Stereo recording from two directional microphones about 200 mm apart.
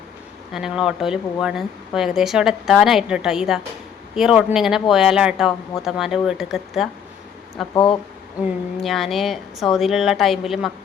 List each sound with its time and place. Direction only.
0.5 s speech: centre (ahead or behind)
7.7 s speech: 25° left (ahead or behind)
8.4 s speech: centre (ahead or behind)